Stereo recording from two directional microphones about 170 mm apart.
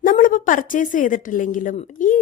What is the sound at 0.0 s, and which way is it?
A woman's voice, 55° left (ahead or behind).